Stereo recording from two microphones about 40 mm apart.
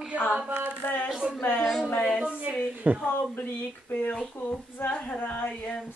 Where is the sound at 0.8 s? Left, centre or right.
Left.